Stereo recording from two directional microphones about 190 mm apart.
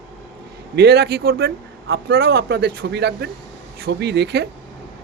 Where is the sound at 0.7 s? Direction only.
55° right (ahead or behind).